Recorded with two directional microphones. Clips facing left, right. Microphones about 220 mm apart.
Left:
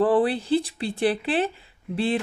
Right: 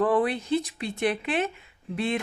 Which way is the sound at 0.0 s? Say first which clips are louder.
Left 3 dB; 30° left (ahead or behind).